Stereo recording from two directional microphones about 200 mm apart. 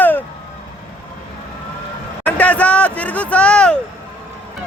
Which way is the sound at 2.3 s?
5° left (ahead or behind).